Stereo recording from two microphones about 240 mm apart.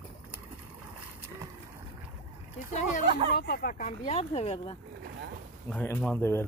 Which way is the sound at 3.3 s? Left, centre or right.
Left.